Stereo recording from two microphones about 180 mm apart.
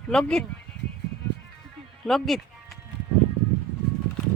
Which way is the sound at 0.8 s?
65° right (ahead or behind).